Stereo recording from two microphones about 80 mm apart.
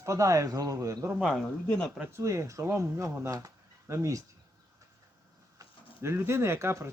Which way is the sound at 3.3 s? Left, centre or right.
Right.